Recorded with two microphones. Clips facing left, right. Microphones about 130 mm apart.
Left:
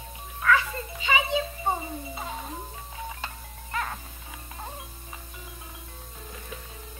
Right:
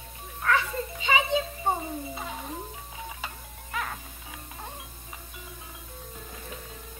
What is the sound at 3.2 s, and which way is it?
Music, centre (ahead or behind).